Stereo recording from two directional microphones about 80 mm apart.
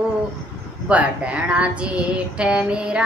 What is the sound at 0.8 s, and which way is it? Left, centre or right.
Speech, centre.